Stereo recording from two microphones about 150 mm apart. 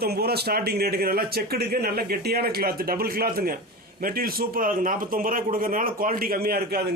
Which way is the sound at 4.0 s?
75° right (ahead or behind).